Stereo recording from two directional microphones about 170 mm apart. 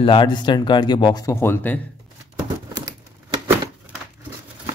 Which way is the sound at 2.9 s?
20° right (ahead or behind).